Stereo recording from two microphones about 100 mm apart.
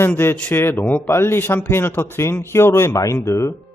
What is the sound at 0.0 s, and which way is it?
A man's voice, 25° left (ahead or behind).